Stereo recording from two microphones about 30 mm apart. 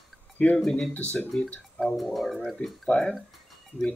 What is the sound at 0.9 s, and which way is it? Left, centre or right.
Speech, left.